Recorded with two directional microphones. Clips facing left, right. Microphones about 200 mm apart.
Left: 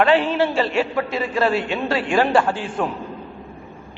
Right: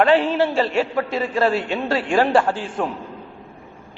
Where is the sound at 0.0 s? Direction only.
40° right (ahead or behind).